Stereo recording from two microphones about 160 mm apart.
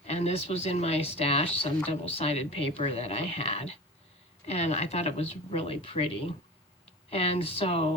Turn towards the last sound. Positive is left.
turn(degrees=35)  # may be behind; listen again after turning